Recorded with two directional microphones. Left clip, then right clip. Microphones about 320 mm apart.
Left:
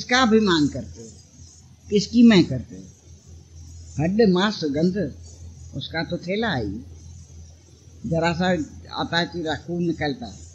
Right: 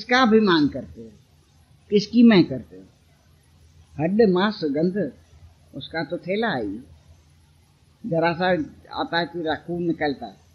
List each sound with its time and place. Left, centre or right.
0.0 s speech: left
1.9 s speech: left
3.9 s speech: left
8.1 s speech: left